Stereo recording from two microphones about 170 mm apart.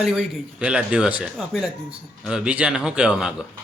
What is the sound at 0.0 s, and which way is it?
A man's voice, 5° right (ahead or behind).